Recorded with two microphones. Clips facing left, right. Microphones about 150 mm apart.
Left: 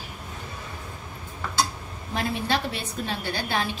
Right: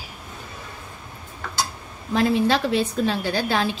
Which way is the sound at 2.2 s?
90° right.